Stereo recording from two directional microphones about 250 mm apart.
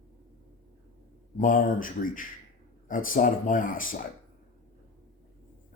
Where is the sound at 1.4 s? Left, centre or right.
Left.